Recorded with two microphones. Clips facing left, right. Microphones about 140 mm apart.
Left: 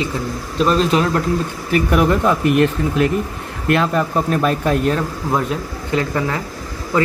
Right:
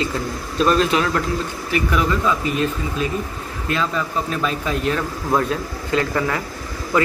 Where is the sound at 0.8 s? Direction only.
35° left (ahead or behind).